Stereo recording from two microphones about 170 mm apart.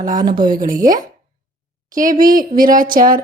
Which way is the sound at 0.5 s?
55° right (ahead or behind).